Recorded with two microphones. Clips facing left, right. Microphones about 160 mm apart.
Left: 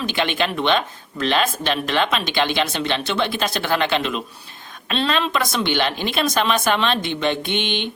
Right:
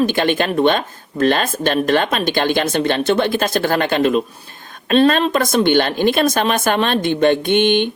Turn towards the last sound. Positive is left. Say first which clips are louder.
# right 10 dB
turn(degrees=-50)  # may be behind; listen again after turning